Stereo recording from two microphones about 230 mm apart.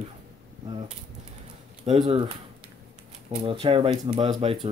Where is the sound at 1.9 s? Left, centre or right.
Right.